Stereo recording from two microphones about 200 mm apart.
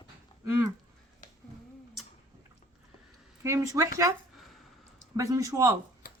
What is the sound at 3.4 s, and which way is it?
Speech, 15° right (ahead or behind).